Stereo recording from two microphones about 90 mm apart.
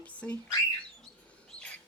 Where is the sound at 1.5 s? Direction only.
10° left (ahead or behind).